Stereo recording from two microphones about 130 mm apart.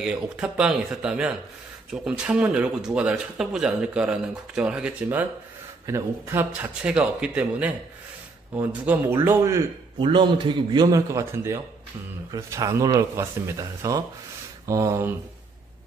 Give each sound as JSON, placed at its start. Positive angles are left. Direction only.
{"t": 0.0, "sound": "speech", "side_deg": -5}
{"t": 5.9, "sound": "speech", "side_deg": -20}
{"t": 9.9, "sound": "a man's voice", "side_deg": -35}